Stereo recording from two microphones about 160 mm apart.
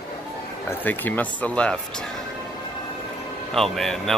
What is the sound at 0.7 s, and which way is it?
Speech, 10° left (ahead or behind).